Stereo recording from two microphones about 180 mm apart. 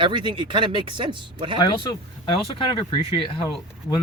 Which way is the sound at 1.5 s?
25° left (ahead or behind).